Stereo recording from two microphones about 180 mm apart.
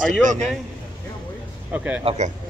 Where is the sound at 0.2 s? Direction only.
45° right (ahead or behind).